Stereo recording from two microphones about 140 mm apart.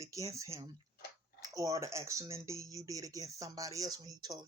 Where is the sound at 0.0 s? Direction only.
25° right (ahead or behind).